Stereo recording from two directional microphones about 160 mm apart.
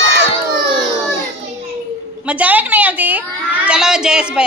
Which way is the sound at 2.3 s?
10° right (ahead or behind).